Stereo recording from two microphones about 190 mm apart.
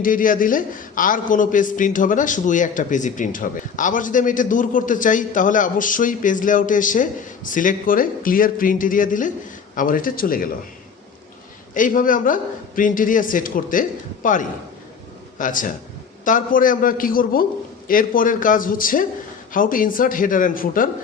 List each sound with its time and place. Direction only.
0.0 s a man's voice: 45° left (ahead or behind)
11.7 s a man's voice: 45° left (ahead or behind)